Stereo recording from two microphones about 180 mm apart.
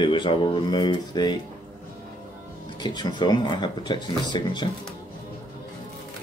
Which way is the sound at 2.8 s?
25° left (ahead or behind).